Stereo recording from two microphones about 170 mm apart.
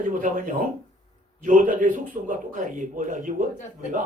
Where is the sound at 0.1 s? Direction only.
50° right (ahead or behind).